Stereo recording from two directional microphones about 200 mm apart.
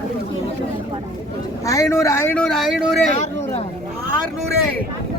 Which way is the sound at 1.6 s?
15° left (ahead or behind).